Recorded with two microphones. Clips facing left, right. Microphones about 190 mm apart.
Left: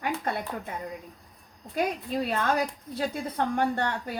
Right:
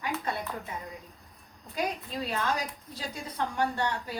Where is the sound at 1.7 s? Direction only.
55° left (ahead or behind).